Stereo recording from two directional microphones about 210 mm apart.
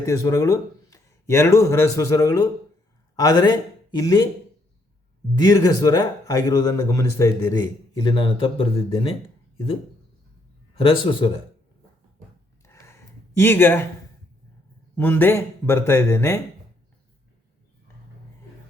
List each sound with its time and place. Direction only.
0.0 s speech: 15° left (ahead or behind)
5.3 s speech: 15° left (ahead or behind)
10.8 s speech: 20° left (ahead or behind)
12.6 s a sound: 15° left (ahead or behind)
14.9 s speech: 10° left (ahead or behind)